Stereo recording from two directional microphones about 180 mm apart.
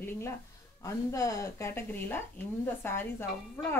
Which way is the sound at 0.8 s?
20° left (ahead or behind).